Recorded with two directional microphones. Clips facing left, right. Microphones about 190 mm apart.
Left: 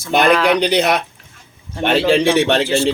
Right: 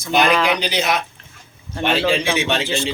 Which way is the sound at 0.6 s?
60° left (ahead or behind).